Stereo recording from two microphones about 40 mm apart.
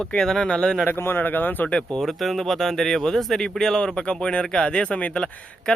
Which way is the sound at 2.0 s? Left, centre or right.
Centre.